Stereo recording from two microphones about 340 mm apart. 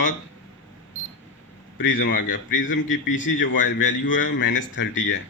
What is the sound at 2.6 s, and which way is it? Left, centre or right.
Speech, left.